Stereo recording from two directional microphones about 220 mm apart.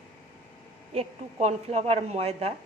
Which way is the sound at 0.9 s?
30° right (ahead or behind).